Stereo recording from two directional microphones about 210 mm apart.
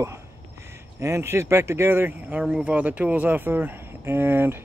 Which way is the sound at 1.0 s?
15° right (ahead or behind).